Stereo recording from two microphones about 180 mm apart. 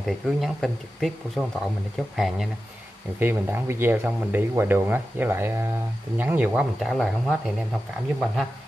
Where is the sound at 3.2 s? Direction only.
10° right (ahead or behind).